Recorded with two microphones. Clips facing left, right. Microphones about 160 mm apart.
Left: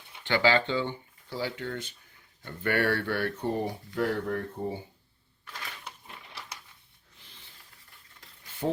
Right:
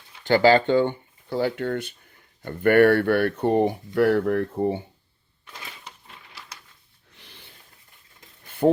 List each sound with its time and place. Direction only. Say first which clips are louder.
0.3 s speech: right 8 dB; 40° right (ahead or behind); by 4.8 s 75° right (ahead or behind)
7.1 s snort: right 6 dB; 70° right (ahead or behind)
8.4 s a sound: right 11 dB; 55° right (ahead or behind)